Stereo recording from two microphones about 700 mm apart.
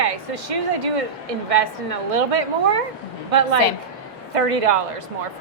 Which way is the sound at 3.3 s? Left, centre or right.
Right.